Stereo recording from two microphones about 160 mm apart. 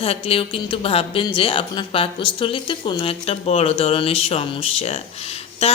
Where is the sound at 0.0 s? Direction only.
35° left (ahead or behind).